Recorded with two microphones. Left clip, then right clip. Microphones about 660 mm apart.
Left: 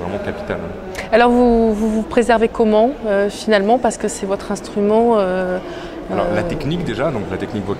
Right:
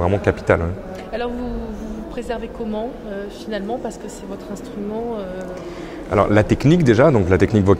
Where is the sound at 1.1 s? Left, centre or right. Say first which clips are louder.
Left 15 dB; left.